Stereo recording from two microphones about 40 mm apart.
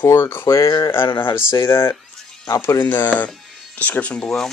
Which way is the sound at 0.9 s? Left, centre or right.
Left.